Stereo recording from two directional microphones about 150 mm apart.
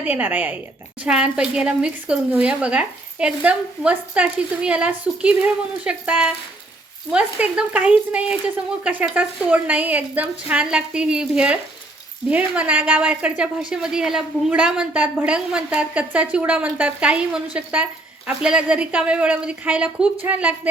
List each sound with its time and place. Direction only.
0.0 s a woman's voice: 10° right (ahead or behind)